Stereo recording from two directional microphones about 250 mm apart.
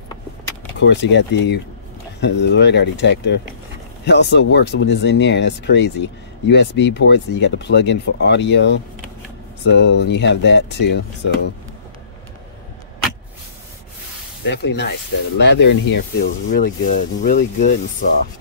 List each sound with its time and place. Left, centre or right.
0.7 s speech: left
14.4 s speech: left